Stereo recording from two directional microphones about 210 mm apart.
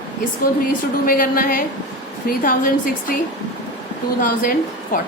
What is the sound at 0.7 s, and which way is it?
A woman's voice, 40° left (ahead or behind).